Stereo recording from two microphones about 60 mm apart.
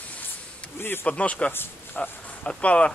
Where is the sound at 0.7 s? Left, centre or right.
Left.